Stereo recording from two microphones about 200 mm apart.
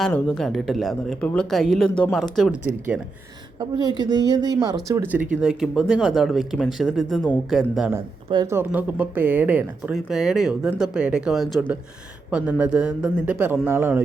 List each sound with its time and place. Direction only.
0.0 s a man's voice: centre (ahead or behind)
3.6 s a woman's voice: 20° right (ahead or behind); by 7.9 s centre (ahead or behind)
7.9 s a man's voice: 15° right (ahead or behind)